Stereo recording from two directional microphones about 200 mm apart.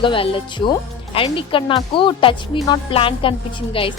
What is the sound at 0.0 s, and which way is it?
Speech, 25° left (ahead or behind).